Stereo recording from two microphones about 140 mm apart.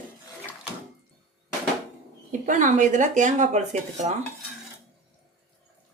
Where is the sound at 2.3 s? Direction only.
65° right (ahead or behind).